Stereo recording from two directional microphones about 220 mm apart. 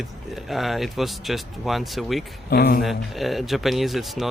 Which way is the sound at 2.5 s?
45° left (ahead or behind).